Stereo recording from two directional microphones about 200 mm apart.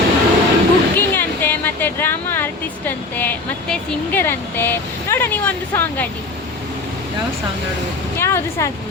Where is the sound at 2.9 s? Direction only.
10° left (ahead or behind).